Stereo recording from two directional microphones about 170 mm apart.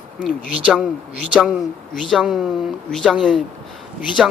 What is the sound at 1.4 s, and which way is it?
Speech, 5° right (ahead or behind).